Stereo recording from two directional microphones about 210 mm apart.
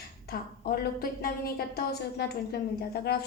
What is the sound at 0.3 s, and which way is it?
A woman's voice, 45° left (ahead or behind).